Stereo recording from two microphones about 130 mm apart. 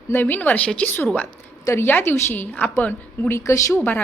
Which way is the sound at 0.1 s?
15° left (ahead or behind).